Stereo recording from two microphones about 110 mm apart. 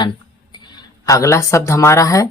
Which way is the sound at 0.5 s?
40° left (ahead or behind).